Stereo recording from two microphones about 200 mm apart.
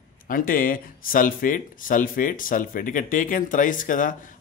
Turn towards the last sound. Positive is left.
turn(degrees=40)  # may be behind; listen again after turning